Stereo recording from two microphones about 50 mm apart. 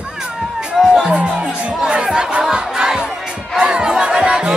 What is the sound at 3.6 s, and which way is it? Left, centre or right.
Crowd, centre.